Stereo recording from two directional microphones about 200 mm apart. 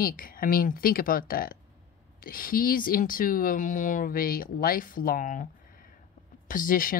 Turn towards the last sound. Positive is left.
turn(degrees=45)  # may be behind; listen again after turning